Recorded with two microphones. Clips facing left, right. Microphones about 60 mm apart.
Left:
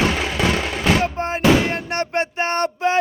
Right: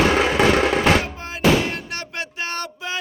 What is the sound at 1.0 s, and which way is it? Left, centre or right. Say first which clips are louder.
Music: left 3 dB; left.